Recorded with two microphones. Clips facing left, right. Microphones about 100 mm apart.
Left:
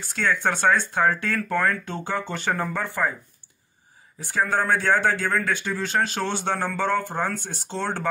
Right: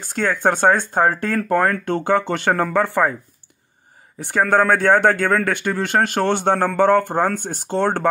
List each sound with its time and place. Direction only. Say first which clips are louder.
0.0 s speech: right 5 dB; 45° right (ahead or behind); by 3.2 s 65° right (ahead or behind)
4.2 s speech: right 7 dB; 60° right (ahead or behind)